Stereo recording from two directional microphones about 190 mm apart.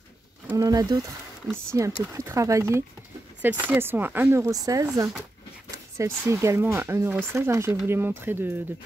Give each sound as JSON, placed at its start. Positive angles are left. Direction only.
{"t": 0.5, "sound": "speech", "side_deg": -15}
{"t": 5.9, "sound": "speech", "side_deg": -15}